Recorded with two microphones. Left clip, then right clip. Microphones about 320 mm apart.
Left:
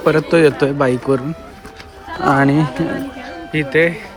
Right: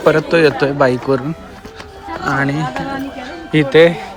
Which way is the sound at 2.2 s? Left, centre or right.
Centre.